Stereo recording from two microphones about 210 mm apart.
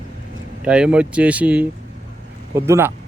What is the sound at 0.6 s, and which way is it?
Speech, 5° right (ahead or behind).